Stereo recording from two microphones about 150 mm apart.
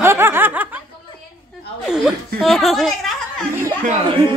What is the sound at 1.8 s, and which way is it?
Speech, centre (ahead or behind).